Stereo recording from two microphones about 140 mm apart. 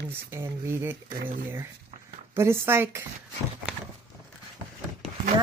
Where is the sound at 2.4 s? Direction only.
15° right (ahead or behind).